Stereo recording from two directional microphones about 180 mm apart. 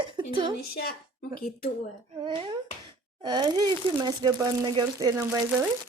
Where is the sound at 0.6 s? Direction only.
60° left (ahead or behind).